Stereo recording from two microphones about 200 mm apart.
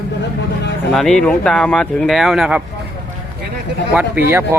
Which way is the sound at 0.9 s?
5° left (ahead or behind).